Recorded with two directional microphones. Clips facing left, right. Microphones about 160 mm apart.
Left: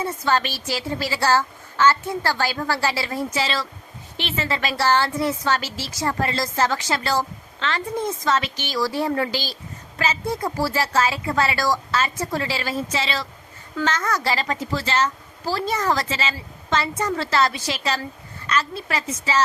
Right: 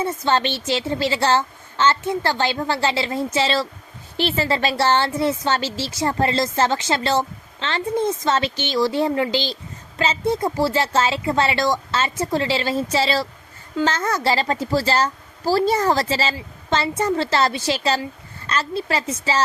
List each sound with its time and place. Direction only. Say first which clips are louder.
0.0 s a woman's voice: right 2 dB; 25° right (ahead or behind)